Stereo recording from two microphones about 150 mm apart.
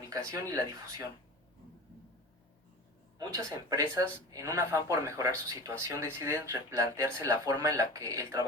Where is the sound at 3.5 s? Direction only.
20° right (ahead or behind).